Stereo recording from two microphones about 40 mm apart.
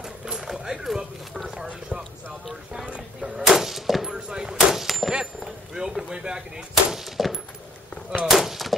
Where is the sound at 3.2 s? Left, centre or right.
Centre.